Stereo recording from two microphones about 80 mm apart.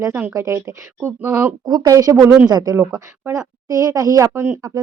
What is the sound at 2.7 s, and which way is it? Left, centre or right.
Speech, right.